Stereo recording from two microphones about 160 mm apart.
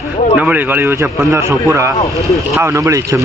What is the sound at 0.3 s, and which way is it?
A man's voice, 10° right (ahead or behind).